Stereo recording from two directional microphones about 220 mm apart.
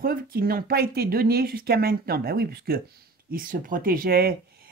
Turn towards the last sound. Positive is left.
turn(degrees=-45)  # may be behind; listen again after turning